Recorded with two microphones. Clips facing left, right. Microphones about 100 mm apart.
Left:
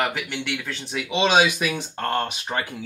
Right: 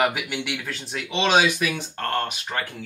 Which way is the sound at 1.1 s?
20° left (ahead or behind).